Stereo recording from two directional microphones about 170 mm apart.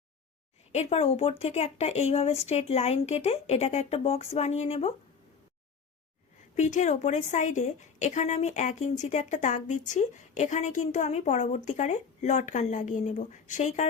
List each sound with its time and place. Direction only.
0.7 s speech: 40° left (ahead or behind)
6.6 s a woman's voice: 45° left (ahead or behind)